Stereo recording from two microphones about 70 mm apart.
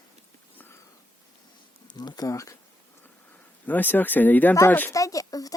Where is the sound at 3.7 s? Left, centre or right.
Left.